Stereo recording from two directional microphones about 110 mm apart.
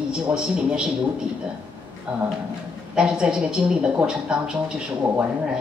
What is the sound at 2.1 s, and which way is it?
Speech, 10° right (ahead or behind).